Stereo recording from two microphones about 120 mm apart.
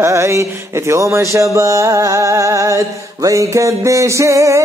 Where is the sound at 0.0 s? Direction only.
20° right (ahead or behind).